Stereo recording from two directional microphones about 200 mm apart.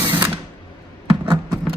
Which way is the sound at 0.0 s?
20° right (ahead or behind).